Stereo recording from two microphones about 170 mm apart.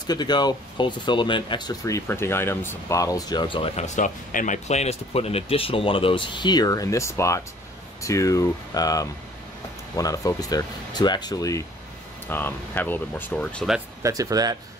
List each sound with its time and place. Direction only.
0.0 s speech: 25° left (ahead or behind); by 13.7 s 5° left (ahead or behind)
14.0 s speech: 20° right (ahead or behind)